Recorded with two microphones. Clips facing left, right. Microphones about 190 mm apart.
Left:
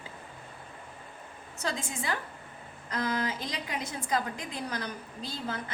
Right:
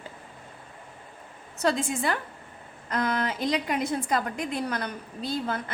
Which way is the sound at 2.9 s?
60° right (ahead or behind).